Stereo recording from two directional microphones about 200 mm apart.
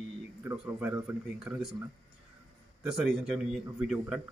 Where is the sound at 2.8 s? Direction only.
5° right (ahead or behind).